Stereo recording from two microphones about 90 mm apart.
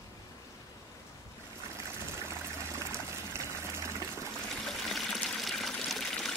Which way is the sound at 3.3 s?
30° right (ahead or behind).